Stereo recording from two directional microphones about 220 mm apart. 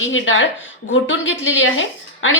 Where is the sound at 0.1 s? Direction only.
60° left (ahead or behind).